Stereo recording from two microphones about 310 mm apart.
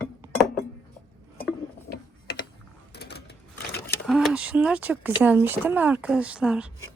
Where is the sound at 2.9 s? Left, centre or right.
Left.